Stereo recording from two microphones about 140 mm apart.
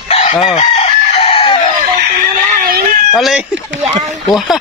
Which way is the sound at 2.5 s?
85° right.